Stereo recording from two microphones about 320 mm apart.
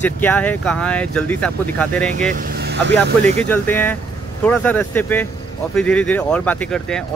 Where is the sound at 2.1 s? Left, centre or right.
Right.